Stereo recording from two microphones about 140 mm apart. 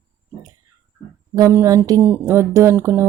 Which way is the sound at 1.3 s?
20° right (ahead or behind).